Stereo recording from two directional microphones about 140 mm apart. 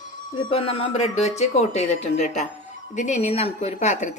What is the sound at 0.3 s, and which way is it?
Speech, 40° left (ahead or behind).